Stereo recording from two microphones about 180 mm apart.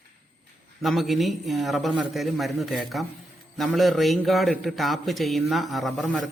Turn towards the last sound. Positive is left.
turn(degrees=0)  # may be behind; listen again after turning